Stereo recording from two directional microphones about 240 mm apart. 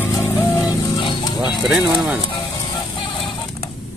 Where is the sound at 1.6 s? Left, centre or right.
Centre.